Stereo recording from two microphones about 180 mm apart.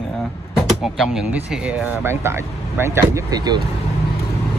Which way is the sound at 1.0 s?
5° right (ahead or behind).